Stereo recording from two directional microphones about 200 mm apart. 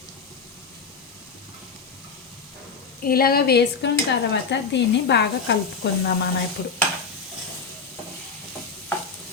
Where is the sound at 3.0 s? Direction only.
50° left (ahead or behind).